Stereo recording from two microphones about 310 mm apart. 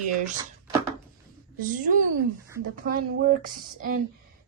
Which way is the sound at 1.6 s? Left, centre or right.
Right.